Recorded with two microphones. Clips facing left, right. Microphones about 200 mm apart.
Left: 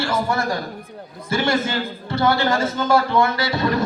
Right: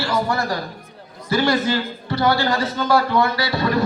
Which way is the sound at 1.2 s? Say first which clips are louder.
Right 2 dB; 25° left (ahead or behind).